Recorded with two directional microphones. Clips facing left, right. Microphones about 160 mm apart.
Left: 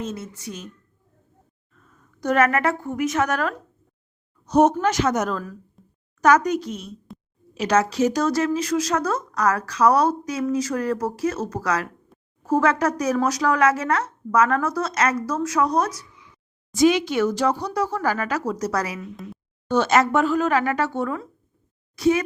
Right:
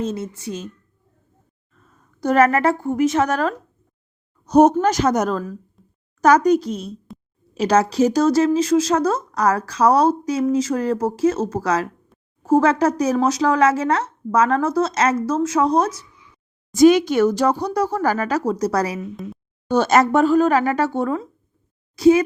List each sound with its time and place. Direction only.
0.0 s speech: 30° right (ahead or behind)
2.2 s speech: 35° right (ahead or behind)
4.4 s speech: 40° right (ahead or behind)
5.8 s a sound: centre (ahead or behind)
6.2 s speech: 35° right (ahead or behind)
16.7 s a child's voice: 45° right (ahead or behind)